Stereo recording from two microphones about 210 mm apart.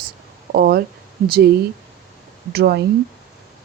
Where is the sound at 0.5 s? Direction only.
45° right (ahead or behind).